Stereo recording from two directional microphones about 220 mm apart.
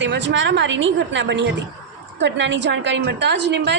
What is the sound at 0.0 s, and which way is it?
A woman's voice, 55° right (ahead or behind).